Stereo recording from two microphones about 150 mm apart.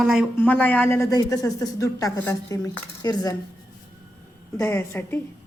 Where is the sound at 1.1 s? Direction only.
25° left (ahead or behind).